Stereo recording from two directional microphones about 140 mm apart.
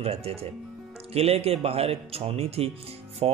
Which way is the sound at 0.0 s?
45° right (ahead or behind).